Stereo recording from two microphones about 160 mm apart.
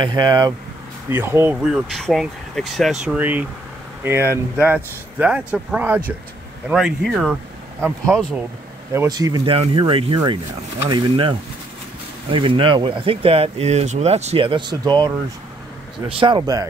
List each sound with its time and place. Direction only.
0.0 s speech: 25° right (ahead or behind)
1.1 s speech: 15° right (ahead or behind)
8.9 s speech: 20° right (ahead or behind)
9.5 s speech: 35° right (ahead or behind)
16.2 s speech: 30° right (ahead or behind)